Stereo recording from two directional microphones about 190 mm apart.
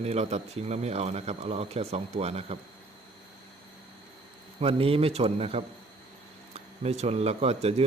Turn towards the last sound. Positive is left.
turn(degrees=-35)  # may be behind; listen again after turning